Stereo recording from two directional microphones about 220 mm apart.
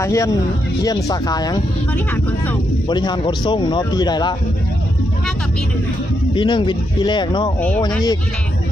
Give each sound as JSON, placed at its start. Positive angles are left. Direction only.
{"t": 0.0, "sound": "speech", "side_deg": 15}
{"t": 2.9, "sound": "speech", "side_deg": 20}
{"t": 6.3, "sound": "speech", "side_deg": 20}